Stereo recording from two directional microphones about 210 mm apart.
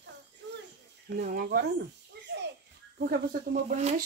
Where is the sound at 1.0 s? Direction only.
40° right (ahead or behind).